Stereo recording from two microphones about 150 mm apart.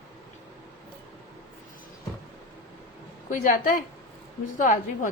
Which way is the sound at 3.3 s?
65° left (ahead or behind).